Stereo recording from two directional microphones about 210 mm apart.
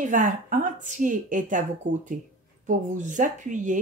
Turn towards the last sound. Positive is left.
turn(degrees=-35)  # may be behind; listen again after turning